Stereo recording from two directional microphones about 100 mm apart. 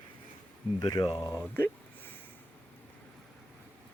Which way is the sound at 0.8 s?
45° left (ahead or behind).